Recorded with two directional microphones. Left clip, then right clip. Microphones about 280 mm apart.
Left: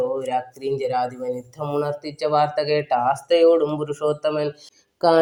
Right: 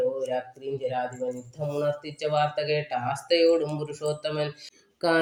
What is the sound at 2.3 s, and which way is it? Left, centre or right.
Speech, centre.